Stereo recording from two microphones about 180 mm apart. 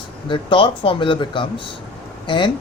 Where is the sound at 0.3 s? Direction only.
30° left (ahead or behind).